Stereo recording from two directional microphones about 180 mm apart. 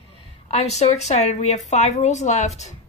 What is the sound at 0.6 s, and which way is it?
A woman's voice, 35° left (ahead or behind).